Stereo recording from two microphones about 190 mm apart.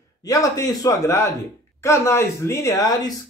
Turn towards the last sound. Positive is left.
turn(degrees=20)  # may be behind; listen again after turning